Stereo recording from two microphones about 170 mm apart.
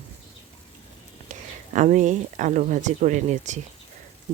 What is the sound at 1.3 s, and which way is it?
Speech, 50° right (ahead or behind).